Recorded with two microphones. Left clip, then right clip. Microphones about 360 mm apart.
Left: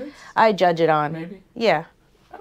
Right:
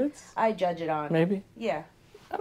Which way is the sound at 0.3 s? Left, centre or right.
Left.